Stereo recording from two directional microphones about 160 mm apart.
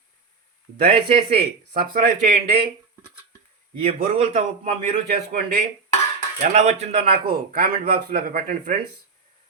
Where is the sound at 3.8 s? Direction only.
40° right (ahead or behind).